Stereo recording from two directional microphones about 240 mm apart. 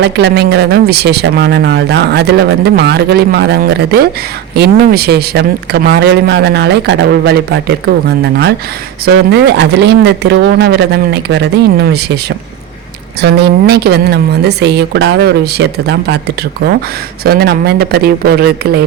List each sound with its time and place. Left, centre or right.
0.0 s speech: right
13.2 s speech: right